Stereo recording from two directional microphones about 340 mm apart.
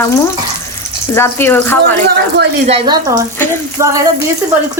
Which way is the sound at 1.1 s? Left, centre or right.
Centre.